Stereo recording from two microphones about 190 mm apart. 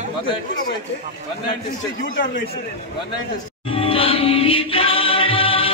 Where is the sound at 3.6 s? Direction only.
30° left (ahead or behind).